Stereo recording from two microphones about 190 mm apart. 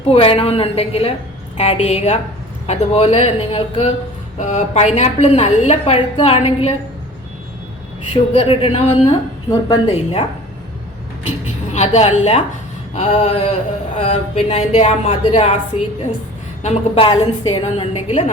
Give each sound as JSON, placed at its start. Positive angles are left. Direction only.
{"t": 0.1, "sound": "a woman's voice", "side_deg": 30}
{"t": 8.1, "sound": "speech", "side_deg": 30}
{"t": 9.5, "sound": "a woman's voice", "side_deg": 20}
{"t": 9.8, "sound": "speech", "side_deg": 30}
{"t": 11.3, "sound": "speech", "side_deg": 35}